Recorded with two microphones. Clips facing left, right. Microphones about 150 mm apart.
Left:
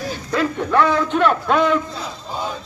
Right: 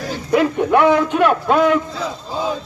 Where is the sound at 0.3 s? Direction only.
15° right (ahead or behind).